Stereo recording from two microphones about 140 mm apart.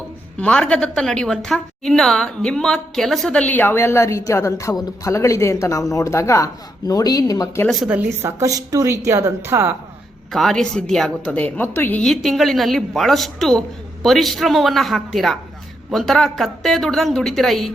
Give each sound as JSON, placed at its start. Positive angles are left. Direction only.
{"t": 0.3, "sound": "a woman's voice", "side_deg": 10}
{"t": 7.9, "sound": "speech", "side_deg": -10}
{"t": 8.4, "sound": "a woman's voice", "side_deg": -25}
{"t": 10.3, "sound": "a woman's voice", "side_deg": 5}